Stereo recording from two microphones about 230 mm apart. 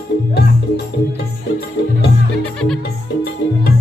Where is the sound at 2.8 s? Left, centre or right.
Left.